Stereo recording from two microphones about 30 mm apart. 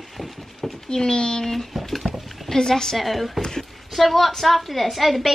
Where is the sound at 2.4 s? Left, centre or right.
Centre.